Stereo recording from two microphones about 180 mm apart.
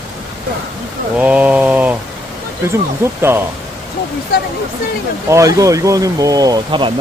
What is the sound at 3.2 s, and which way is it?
Speech, 15° right (ahead or behind).